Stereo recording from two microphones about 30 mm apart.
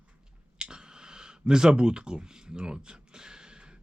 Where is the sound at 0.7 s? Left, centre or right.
Right.